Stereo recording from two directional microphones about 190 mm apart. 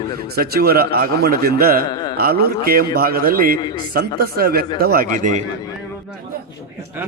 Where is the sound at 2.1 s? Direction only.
55° right (ahead or behind).